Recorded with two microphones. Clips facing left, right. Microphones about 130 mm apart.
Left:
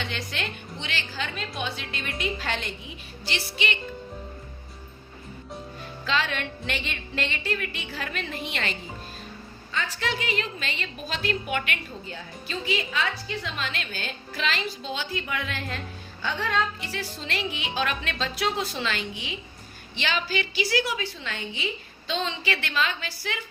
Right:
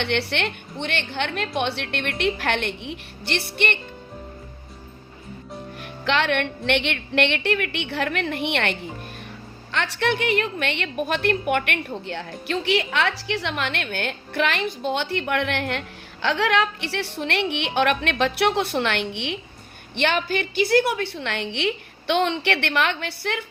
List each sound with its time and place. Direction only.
0.0 s a woman's voice: 70° right (ahead or behind)
5.8 s a woman's voice: 65° right (ahead or behind)
16.2 s a woman's voice: 90° right; by 19.4 s 65° right (ahead or behind)
20.0 s a woman's voice: 55° right (ahead or behind)